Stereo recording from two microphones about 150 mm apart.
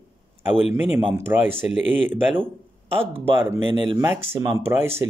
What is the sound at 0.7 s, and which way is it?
Speech, 15° right (ahead or behind).